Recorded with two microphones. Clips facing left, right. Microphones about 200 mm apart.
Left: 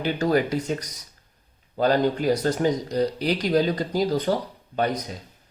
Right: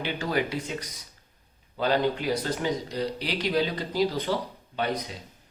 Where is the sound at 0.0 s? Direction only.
45° left (ahead or behind).